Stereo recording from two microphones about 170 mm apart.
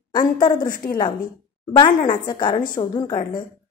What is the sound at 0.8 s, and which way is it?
A woman's voice, 20° left (ahead or behind).